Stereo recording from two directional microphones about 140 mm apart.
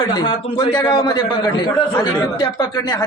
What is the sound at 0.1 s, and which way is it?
A man's voice, 35° left (ahead or behind).